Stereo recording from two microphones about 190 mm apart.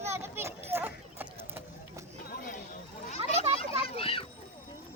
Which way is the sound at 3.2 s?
30° right (ahead or behind).